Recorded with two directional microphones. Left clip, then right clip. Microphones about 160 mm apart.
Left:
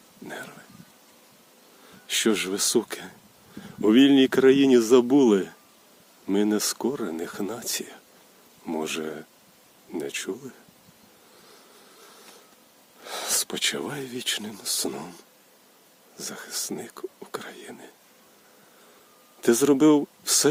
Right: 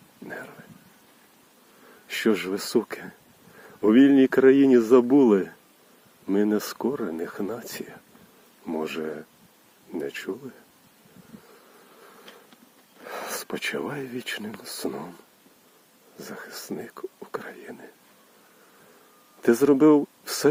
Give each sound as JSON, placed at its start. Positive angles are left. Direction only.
{"t": 0.3, "sound": "a sound", "side_deg": 15}
{"t": 2.0, "sound": "speech", "side_deg": 10}
{"t": 13.1, "sound": "a sound", "side_deg": 5}
{"t": 14.3, "sound": "speech", "side_deg": 5}
{"t": 16.1, "sound": "speech", "side_deg": 10}
{"t": 19.4, "sound": "speech", "side_deg": 5}